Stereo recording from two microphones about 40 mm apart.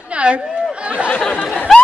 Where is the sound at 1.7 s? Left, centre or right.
Centre.